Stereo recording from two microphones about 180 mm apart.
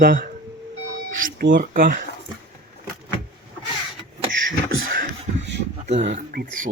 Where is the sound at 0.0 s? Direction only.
55° right (ahead or behind).